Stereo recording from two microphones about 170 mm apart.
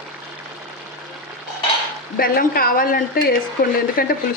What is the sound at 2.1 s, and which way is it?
Stir, 60° left (ahead or behind).